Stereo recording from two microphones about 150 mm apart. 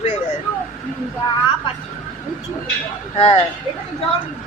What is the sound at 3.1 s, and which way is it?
Speech, 40° left (ahead or behind).